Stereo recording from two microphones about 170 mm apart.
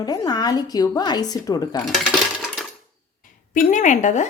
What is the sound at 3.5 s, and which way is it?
Speech, 45° left (ahead or behind).